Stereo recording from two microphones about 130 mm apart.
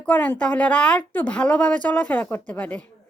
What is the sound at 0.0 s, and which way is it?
A woman's voice, 10° left (ahead or behind).